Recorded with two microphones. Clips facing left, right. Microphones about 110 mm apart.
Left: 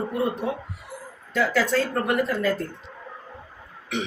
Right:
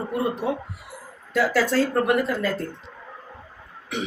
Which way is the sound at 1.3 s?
5° right (ahead or behind).